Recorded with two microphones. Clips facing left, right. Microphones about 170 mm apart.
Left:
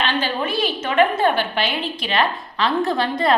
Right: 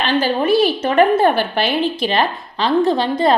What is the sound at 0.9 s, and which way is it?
A woman's voice, 40° right (ahead or behind).